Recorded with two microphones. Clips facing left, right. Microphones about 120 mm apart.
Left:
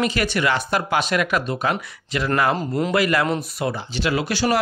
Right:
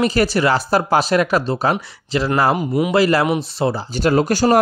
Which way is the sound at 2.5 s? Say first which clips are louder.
Right 4 dB; 10° right (ahead or behind).